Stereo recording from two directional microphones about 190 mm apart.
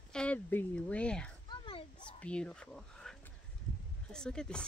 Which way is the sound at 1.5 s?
25° left (ahead or behind).